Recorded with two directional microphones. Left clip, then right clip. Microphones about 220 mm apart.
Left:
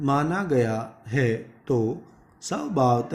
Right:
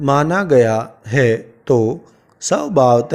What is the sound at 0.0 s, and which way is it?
Speech, 45° right (ahead or behind).